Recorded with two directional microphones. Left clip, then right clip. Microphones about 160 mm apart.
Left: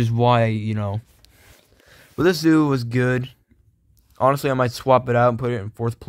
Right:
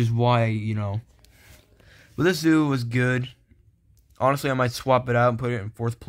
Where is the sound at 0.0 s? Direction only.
40° left (ahead or behind).